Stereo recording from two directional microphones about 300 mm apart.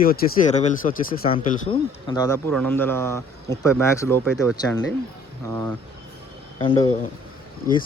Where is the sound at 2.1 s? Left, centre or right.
Centre.